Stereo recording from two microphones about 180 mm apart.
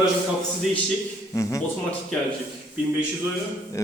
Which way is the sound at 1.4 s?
15° left (ahead or behind).